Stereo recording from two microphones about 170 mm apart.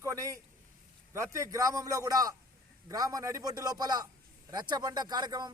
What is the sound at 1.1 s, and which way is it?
A man's voice, 15° right (ahead or behind).